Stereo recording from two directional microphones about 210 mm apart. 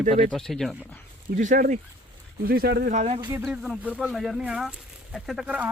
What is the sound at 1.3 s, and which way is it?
Speech, 40° right (ahead or behind).